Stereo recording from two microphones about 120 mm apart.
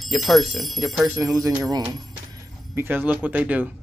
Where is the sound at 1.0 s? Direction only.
20° right (ahead or behind).